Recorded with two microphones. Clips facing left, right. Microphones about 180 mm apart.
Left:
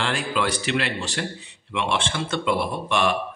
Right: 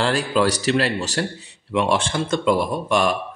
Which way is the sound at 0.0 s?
40° right (ahead or behind).